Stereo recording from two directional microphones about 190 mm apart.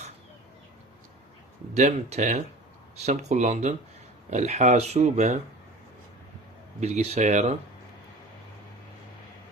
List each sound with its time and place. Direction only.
1.7 s speech: 35° right (ahead or behind)
6.7 s speech: 35° right (ahead or behind)